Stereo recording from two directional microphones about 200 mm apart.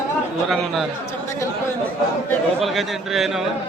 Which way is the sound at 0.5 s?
Centre (ahead or behind).